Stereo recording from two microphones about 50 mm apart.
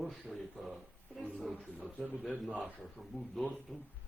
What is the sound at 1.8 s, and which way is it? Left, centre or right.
Speech, right.